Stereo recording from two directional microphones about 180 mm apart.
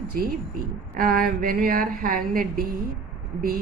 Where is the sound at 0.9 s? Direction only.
55° right (ahead or behind).